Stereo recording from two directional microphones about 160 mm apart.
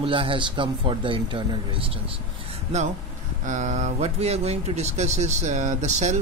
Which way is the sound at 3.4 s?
50° right (ahead or behind).